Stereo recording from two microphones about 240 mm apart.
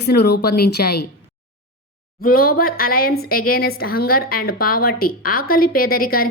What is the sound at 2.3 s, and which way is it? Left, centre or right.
A woman's voice, left.